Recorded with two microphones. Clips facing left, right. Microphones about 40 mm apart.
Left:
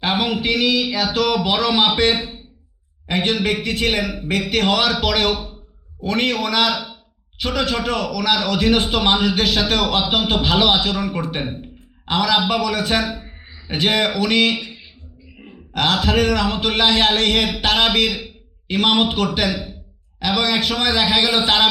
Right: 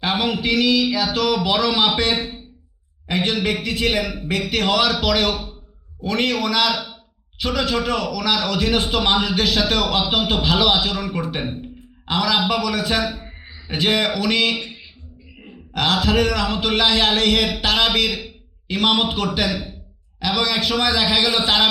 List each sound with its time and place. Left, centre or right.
0.0 s a sound: left
1.5 s a man's voice: left
3.1 s a man's voice: left
15.7 s a man's voice: left